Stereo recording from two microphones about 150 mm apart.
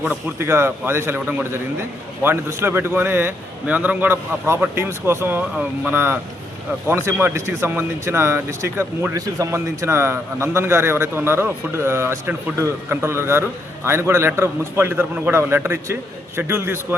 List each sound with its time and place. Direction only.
0.0 s speech: 10° right (ahead or behind)